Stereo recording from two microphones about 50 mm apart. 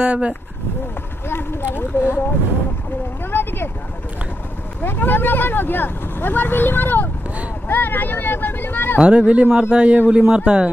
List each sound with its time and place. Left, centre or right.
0.0 s speech: right
1.3 s a sound: left
1.8 s speech: left
3.3 s a sound: left
4.8 s speech: left
9.0 s speech: right